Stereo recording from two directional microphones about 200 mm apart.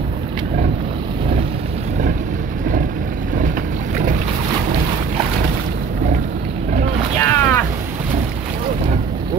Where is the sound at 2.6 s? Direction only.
40° right (ahead or behind).